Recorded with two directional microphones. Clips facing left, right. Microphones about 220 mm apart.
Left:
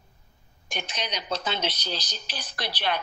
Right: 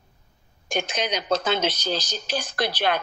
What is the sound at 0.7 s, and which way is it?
Speech, 45° right (ahead or behind).